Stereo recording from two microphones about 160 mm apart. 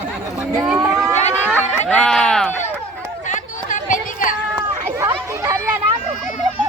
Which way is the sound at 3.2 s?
50° left (ahead or behind).